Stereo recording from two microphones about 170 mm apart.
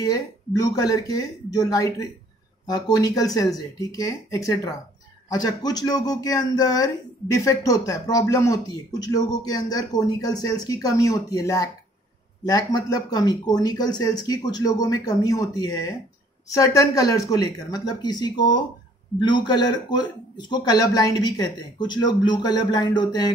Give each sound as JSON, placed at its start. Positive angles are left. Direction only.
{"t": 0.0, "sound": "speech", "side_deg": 20}